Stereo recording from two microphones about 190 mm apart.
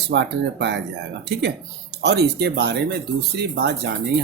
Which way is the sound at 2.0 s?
60° right (ahead or behind).